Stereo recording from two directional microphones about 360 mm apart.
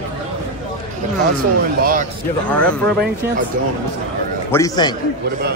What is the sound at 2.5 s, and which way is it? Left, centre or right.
Speech, centre.